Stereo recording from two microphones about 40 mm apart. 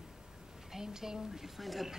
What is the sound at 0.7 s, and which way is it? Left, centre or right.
A woman's voice, centre.